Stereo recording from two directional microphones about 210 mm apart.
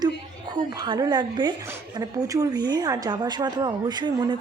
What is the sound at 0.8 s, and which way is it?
Speech, 20° right (ahead or behind).